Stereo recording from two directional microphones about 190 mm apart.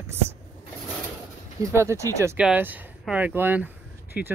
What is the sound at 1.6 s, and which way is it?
Speech, 15° right (ahead or behind).